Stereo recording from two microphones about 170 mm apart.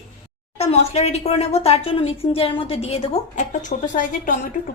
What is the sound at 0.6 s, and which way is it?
A woman's voice, 40° left (ahead or behind).